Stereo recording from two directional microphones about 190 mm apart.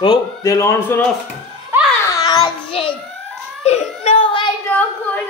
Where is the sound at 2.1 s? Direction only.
20° left (ahead or behind).